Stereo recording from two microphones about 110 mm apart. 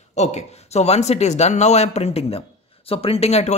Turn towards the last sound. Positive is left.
turn(degrees=70)  # may be behind; listen again after turning